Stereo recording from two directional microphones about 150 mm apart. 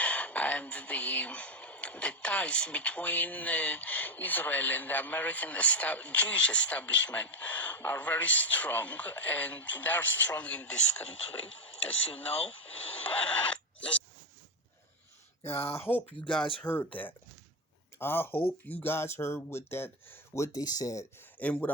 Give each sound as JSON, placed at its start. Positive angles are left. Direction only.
{"t": 0.0, "sound": "speech", "side_deg": 10}
{"t": 12.5, "sound": "speech", "side_deg": 10}
{"t": 15.4, "sound": "speech", "side_deg": 15}
{"t": 18.0, "sound": "speech", "side_deg": 15}
{"t": 21.3, "sound": "speech", "side_deg": 10}